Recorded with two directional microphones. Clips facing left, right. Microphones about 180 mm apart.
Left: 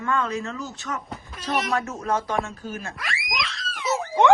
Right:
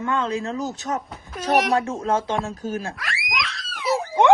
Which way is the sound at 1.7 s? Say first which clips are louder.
Right 4 dB; 30° right (ahead or behind).